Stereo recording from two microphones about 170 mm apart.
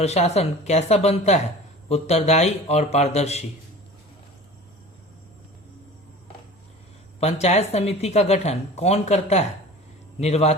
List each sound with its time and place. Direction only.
0.0 s speech: 40° left (ahead or behind)
7.2 s speech: 40° left (ahead or behind)